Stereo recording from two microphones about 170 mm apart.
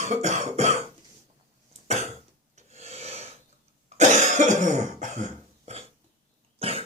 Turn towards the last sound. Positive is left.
turn(degrees=-35)  # may be behind; listen again after turning